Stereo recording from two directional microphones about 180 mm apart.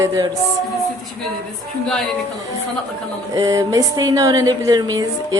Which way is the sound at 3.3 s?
20° right (ahead or behind).